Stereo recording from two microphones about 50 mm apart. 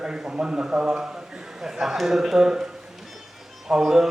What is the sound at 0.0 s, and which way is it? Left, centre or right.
Speech, centre.